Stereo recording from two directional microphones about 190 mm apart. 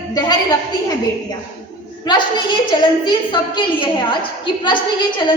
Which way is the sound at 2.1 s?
25° left (ahead or behind).